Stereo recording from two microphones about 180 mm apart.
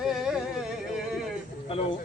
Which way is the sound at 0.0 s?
5° right (ahead or behind).